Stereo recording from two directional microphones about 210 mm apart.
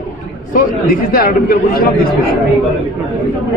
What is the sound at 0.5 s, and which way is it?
A man's voice, 45° left (ahead or behind).